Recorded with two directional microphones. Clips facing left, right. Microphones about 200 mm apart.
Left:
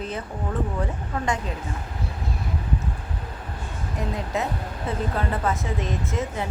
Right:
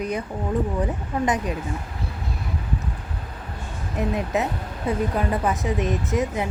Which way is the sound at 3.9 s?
20° right (ahead or behind).